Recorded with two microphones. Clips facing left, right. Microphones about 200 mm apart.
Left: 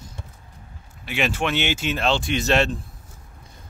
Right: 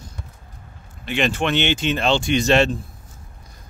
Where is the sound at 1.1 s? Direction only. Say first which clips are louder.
Right 3 dB; 5° left (ahead or behind).